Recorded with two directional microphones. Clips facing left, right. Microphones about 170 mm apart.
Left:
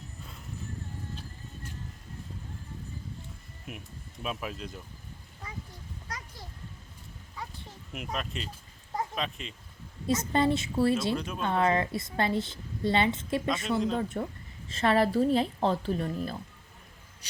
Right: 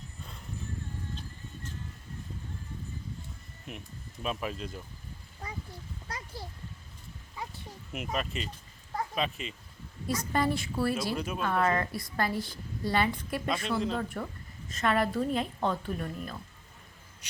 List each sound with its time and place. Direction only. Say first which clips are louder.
0.2 s clip-clop: even; centre (ahead or behind)
3.7 s speech: even; 5° left (ahead or behind)
7.9 s speech: right 2 dB; centre (ahead or behind)
10.1 s a woman's voice: left 3 dB; 25° left (ahead or behind)
11.1 s speech: left 1 dB; 5° right (ahead or behind)
11.4 s a woman's voice: left 2 dB; 25° left (ahead or behind)
13.5 s speech: left 1 dB; centre (ahead or behind)
14.7 s a woman's voice: left 3 dB; 30° left (ahead or behind)